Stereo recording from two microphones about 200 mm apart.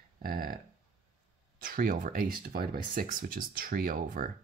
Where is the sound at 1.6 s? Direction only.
45° right (ahead or behind).